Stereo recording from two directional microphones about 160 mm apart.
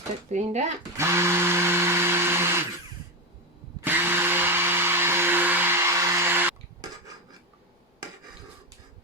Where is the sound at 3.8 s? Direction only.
15° right (ahead or behind).